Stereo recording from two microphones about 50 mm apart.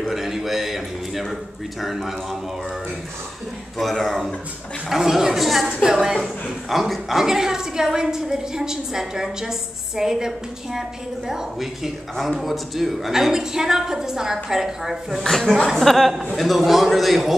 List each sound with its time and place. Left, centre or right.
0.1 s a man's voice: centre
3.7 s a woman's voice: centre
15.2 s speech: centre